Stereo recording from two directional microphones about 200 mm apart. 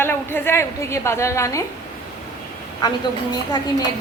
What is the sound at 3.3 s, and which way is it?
Speech, 20° left (ahead or behind).